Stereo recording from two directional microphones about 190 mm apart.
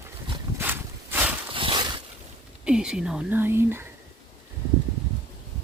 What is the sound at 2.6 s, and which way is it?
Speech, 5° right (ahead or behind).